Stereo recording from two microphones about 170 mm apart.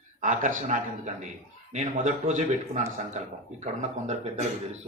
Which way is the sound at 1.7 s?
45° right (ahead or behind).